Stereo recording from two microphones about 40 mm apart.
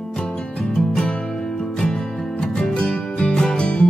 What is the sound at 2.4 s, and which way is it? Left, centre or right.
Music, centre.